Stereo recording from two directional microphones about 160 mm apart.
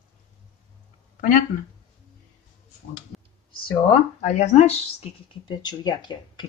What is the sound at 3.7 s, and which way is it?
Speech, 40° left (ahead or behind).